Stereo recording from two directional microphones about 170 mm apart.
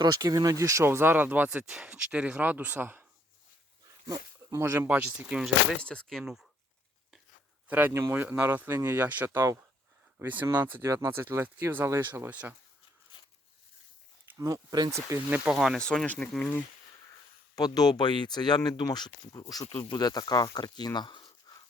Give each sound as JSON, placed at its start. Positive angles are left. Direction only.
{"t": 0.0, "sound": "speech", "side_deg": -20}
{"t": 4.1, "sound": "speech", "side_deg": -20}
{"t": 5.7, "sound": "speech", "side_deg": 5}
{"t": 7.7, "sound": "speech", "side_deg": -10}
{"t": 14.3, "sound": "speech", "side_deg": -20}
{"t": 17.5, "sound": "speech", "side_deg": 25}